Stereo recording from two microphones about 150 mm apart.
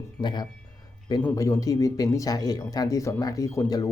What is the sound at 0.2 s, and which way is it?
Speech, 30° left (ahead or behind).